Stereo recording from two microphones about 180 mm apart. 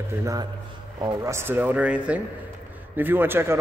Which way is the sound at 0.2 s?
20° right (ahead or behind).